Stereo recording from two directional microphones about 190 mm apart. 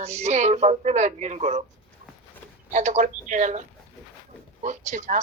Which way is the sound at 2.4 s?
10° left (ahead or behind).